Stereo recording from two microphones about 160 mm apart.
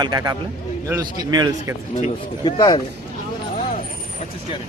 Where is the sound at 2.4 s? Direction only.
25° left (ahead or behind).